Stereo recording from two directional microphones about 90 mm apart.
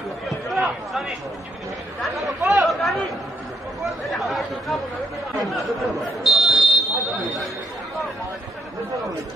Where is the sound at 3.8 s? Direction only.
Centre (ahead or behind).